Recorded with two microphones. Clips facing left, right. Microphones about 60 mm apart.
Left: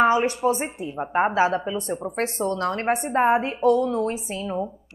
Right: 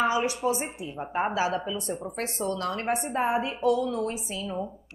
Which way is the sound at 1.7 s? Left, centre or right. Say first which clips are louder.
Left 5 dB; left.